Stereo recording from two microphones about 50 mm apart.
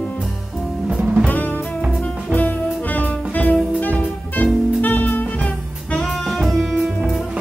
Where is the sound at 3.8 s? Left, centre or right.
Left.